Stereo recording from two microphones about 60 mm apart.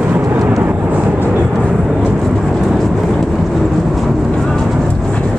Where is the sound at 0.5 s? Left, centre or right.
Right.